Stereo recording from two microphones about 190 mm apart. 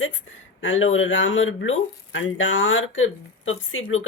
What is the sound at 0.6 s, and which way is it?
Speech, 90° left.